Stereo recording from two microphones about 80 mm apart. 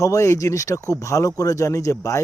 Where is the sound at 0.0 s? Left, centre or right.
Left.